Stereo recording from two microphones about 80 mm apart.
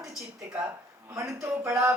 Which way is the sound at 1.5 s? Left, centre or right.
Right.